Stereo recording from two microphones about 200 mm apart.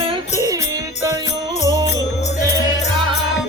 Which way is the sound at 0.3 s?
15° right (ahead or behind).